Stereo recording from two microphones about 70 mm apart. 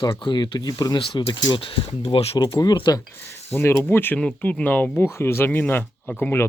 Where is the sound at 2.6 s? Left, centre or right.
Left.